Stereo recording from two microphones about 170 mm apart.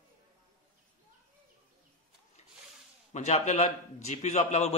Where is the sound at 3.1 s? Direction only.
40° left (ahead or behind).